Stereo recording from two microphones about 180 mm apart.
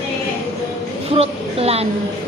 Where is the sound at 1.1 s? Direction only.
35° right (ahead or behind).